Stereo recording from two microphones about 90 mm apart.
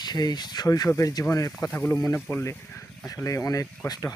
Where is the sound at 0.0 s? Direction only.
50° left (ahead or behind).